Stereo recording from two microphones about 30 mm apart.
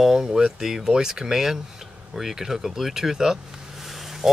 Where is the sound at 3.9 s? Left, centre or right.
Centre.